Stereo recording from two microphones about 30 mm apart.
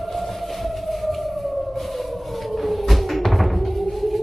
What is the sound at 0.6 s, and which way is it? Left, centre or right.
Siren, centre.